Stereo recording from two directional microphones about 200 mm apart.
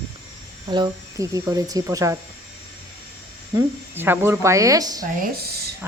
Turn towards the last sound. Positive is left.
turn(degrees=-50)  # may be behind; listen again after turning